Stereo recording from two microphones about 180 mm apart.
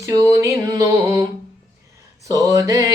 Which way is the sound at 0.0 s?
20° right (ahead or behind).